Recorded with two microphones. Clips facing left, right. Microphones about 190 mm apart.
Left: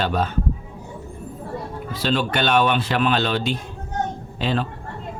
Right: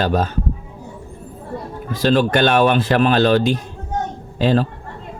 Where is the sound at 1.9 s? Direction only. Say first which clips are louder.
Right 7 dB; 45° right (ahead or behind).